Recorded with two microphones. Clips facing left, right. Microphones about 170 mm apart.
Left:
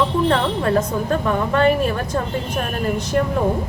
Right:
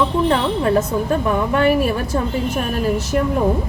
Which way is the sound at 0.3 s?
5° right (ahead or behind).